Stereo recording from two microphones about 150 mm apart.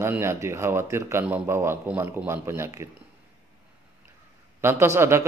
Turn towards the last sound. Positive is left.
turn(degrees=-15)  # may be behind; listen again after turning